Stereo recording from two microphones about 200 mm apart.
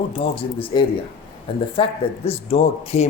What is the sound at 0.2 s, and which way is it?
Speech, 25° left (ahead or behind).